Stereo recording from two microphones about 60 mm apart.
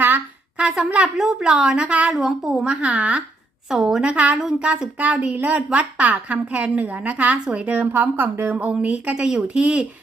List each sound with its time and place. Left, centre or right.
0.9 s a woman's voice: centre
1.2 s a woman's voice: centre
2.1 s a woman's voice: centre
2.6 s a woman's voice: right
3.7 s a woman's voice: centre
4.1 s a woman's voice: right
8.5 s a woman's voice: centre